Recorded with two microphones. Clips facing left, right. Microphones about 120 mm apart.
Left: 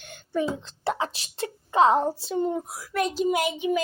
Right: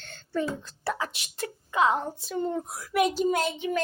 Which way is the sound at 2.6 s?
Centre (ahead or behind).